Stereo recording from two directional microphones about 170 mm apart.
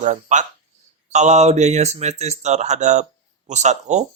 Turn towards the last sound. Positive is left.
turn(degrees=-45)  # may be behind; listen again after turning